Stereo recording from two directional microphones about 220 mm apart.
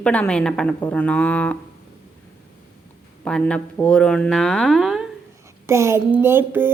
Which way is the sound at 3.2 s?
5° left (ahead or behind).